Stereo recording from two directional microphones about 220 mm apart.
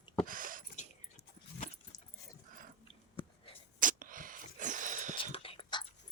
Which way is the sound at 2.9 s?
25° left (ahead or behind).